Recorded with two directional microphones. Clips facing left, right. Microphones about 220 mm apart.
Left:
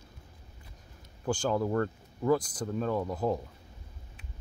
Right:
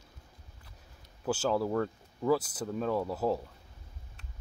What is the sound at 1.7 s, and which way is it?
Speech, centre (ahead or behind).